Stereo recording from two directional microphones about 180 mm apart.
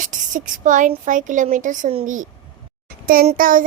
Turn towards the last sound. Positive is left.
turn(degrees=-50)  # may be behind; listen again after turning